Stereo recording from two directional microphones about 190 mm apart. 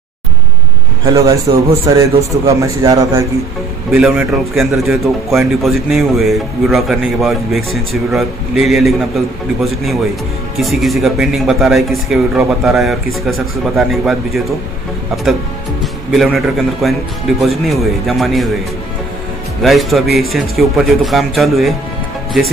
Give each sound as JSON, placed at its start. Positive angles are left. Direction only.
{"t": 1.0, "sound": "a man's voice", "side_deg": -15}
{"t": 3.9, "sound": "speech", "side_deg": -5}
{"t": 15.8, "sound": "speech", "side_deg": 0}
{"t": 19.6, "sound": "speech", "side_deg": 0}